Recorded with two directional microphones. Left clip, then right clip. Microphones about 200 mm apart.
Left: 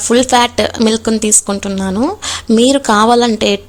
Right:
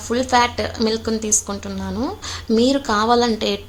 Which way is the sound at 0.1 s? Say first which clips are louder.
Left 7 dB; 45° left (ahead or behind).